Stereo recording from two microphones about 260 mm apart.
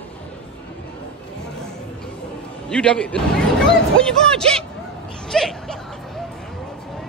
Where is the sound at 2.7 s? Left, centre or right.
Centre.